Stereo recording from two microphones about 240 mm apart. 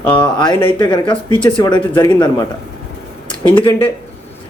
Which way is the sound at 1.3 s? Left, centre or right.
Centre.